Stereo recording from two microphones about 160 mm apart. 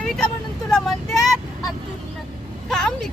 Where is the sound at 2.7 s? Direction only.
5° left (ahead or behind).